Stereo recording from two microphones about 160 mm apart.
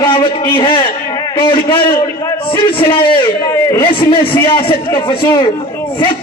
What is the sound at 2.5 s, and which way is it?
Speech, 35° left (ahead or behind).